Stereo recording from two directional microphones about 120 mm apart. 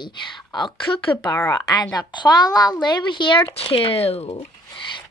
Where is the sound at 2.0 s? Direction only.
35° left (ahead or behind); by 4.2 s 55° left (ahead or behind).